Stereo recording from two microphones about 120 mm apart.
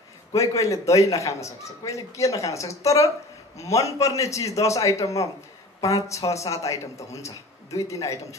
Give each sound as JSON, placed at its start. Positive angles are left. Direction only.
{"t": 0.3, "sound": "a man's voice", "side_deg": 25}